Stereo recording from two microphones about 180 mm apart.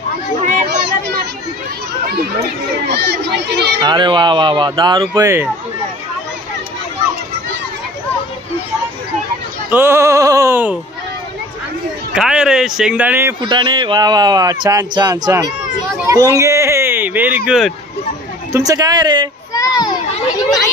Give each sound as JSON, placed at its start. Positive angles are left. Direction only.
{"t": 2.0, "sound": "speech", "side_deg": -65}
{"t": 3.8, "sound": "speech", "side_deg": -25}
{"t": 5.1, "sound": "bleat", "side_deg": -15}
{"t": 9.7, "sound": "bleat", "side_deg": -10}
{"t": 12.2, "sound": "speech", "side_deg": -5}
{"t": 13.5, "sound": "speech", "side_deg": -25}
{"t": 16.1, "sound": "a sound", "side_deg": -20}
{"t": 17.5, "sound": "speech", "side_deg": 0}
{"t": 18.5, "sound": "speech", "side_deg": -20}
{"t": 19.5, "sound": "children playing", "side_deg": 20}